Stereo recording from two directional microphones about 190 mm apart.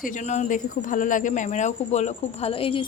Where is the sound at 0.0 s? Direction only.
40° left (ahead or behind).